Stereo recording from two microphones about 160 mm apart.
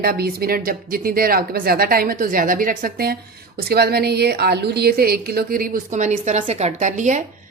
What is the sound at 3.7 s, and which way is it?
A woman's voice, 80° right.